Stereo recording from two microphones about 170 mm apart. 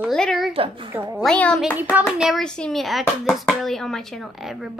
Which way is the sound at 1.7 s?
10° right (ahead or behind).